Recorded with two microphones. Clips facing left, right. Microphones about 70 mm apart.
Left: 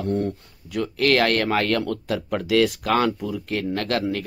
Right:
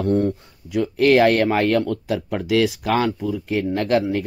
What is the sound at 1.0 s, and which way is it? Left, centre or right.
Speech, centre.